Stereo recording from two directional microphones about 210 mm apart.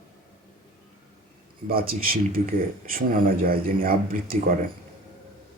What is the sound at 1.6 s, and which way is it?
Speech, 45° right (ahead or behind).